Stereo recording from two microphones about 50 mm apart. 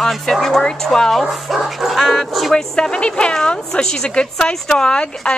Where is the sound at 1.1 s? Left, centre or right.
Centre.